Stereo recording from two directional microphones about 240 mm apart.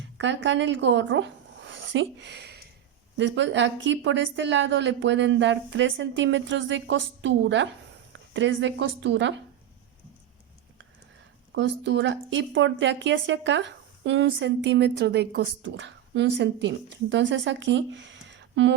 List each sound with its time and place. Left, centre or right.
0.2 s a woman's voice: right
11.5 s a woman's voice: right